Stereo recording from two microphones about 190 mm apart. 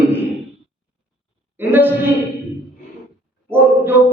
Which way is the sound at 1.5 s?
10° right (ahead or behind).